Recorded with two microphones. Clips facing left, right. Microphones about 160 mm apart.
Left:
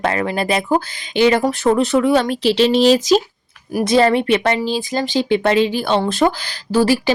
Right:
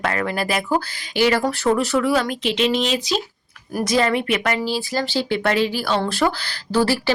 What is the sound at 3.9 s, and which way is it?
Speech, 30° left (ahead or behind).